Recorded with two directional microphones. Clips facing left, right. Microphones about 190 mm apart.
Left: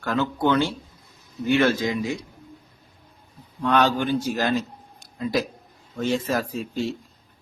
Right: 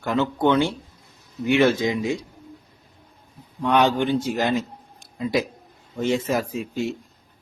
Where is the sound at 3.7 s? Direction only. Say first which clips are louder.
Right 2 dB; 20° right (ahead or behind).